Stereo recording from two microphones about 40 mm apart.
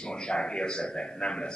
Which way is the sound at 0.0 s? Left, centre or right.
Left.